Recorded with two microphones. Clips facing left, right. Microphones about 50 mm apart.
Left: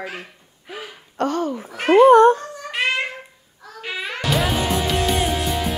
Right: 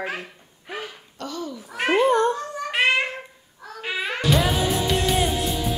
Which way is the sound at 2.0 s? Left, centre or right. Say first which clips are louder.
Left 11 dB; left.